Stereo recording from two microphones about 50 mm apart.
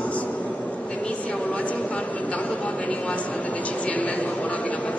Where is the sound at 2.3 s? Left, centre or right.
Left.